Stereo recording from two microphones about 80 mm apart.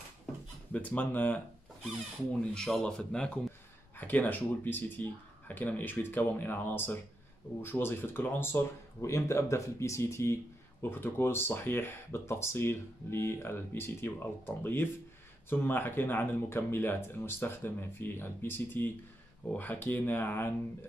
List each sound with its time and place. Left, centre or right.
0.7 s speech: left
2.5 s speech: centre
3.9 s speech: left